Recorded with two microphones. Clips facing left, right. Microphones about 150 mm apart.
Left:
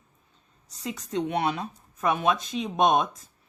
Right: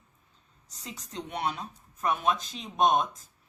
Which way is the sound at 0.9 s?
70° left (ahead or behind).